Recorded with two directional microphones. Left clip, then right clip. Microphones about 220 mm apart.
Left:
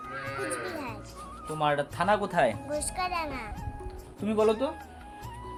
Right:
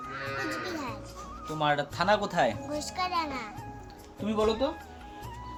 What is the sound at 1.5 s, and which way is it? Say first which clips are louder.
Speech: even; 10° left (ahead or behind).